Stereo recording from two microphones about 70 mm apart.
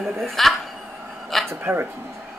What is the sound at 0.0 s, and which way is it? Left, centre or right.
Speech, centre.